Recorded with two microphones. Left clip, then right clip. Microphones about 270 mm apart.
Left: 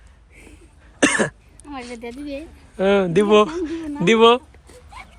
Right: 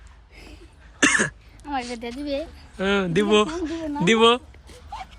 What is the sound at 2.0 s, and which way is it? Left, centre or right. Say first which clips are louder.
Speech: right 1 dB; right.